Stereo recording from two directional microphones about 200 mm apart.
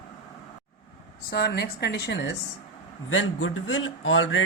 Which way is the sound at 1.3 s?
50° left (ahead or behind).